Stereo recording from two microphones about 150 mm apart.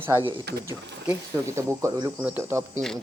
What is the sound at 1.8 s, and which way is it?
Speech, 20° right (ahead or behind).